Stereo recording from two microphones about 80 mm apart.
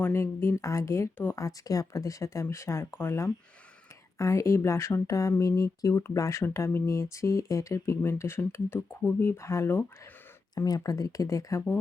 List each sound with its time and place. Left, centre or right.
0.0 s speech: left
1.5 s speech: left
10.6 s speech: left